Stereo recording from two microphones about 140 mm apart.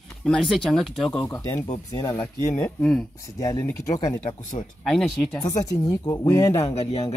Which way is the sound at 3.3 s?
25° left (ahead or behind).